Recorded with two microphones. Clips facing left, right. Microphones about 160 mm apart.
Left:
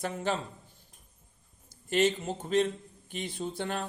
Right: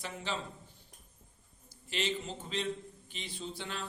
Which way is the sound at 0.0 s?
50° left (ahead or behind).